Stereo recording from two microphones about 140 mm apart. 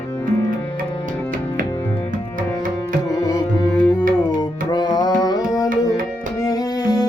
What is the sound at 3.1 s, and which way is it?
Music, 25° left (ahead or behind).